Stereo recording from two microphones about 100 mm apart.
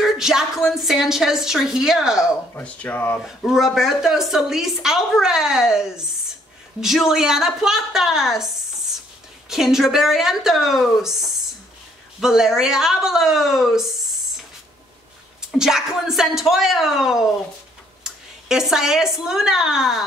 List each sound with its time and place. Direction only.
0.0 s a woman's voice: 5° right (ahead or behind)
2.5 s speech: 15° left (ahead or behind)
3.3 s a woman's voice: 5° right (ahead or behind)
9.5 s a woman's voice: 5° right (ahead or behind)
15.5 s a woman's voice: 5° right (ahead or behind)